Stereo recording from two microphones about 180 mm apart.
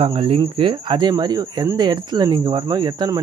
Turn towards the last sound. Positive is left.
turn(degrees=-20)  # may be behind; listen again after turning